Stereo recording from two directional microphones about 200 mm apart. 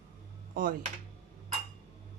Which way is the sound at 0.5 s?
45° right (ahead or behind).